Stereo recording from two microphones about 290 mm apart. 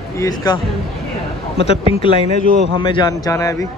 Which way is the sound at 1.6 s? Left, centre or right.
Centre.